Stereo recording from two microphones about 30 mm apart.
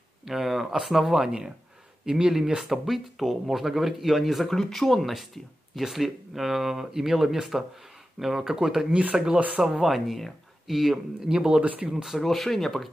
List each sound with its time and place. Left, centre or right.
0.2 s a sound: centre
0.8 s speech: centre
1.1 s speech: right
2.6 s speech: centre
9.3 s speech: right
9.6 s speech: centre
11.2 s speech: right
11.9 s speech: centre
12.2 s speech: centre